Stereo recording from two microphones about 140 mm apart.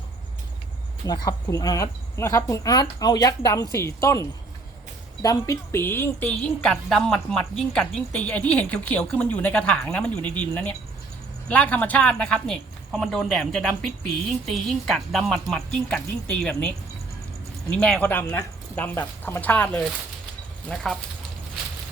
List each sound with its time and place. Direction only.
1.0 s a woman's voice: 25° left (ahead or behind); by 16.7 s 5° left (ahead or behind)
17.7 s a woman's voice: 10° left (ahead or behind)